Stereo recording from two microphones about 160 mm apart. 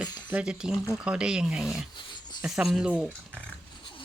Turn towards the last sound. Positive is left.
turn(degrees=-5)  # may be behind; listen again after turning